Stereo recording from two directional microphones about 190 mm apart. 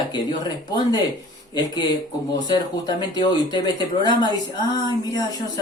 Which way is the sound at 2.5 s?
20° left (ahead or behind).